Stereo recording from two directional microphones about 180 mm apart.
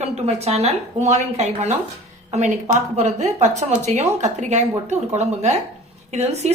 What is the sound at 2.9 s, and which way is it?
Speech, 40° right (ahead or behind).